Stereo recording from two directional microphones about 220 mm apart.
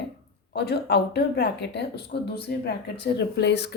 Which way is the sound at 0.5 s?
50° left (ahead or behind).